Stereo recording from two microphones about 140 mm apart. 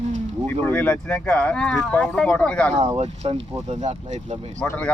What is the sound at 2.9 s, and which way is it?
Speech, 50° right (ahead or behind).